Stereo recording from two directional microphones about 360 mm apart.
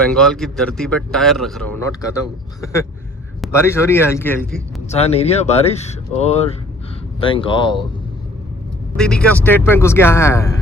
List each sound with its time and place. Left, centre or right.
0.1 s a man's voice: centre
4.9 s speech: centre
9.0 s speech: centre